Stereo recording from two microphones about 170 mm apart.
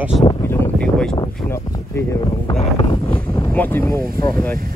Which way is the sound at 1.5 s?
15° left (ahead or behind).